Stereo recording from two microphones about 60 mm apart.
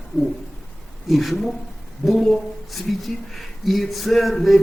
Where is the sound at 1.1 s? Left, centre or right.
Centre.